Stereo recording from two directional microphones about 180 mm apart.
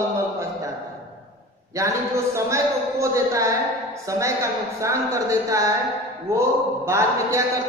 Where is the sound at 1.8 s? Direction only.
15° right (ahead or behind).